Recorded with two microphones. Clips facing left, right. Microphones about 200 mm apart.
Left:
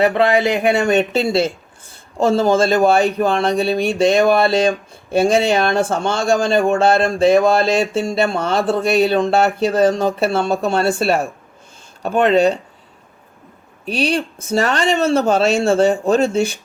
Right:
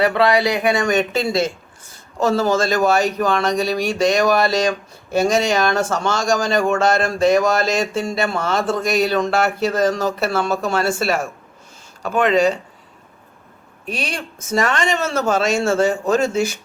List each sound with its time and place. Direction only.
0.8 s speech: 35° left (ahead or behind)
2.1 s a sound: 25° left (ahead or behind)
12.0 s speech: 30° left (ahead or behind)
13.8 s speech: 35° left (ahead or behind)